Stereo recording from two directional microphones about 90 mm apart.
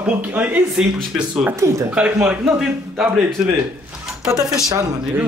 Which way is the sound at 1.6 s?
35° right (ahead or behind).